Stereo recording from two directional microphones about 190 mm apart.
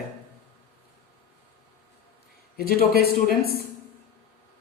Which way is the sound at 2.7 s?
55° left (ahead or behind).